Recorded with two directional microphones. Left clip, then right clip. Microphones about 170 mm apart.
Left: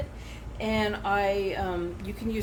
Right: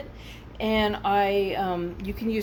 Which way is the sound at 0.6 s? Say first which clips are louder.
Right 4 dB; 40° right (ahead or behind).